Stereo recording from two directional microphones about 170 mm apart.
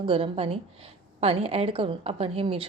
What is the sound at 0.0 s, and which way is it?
A woman's voice, 30° right (ahead or behind).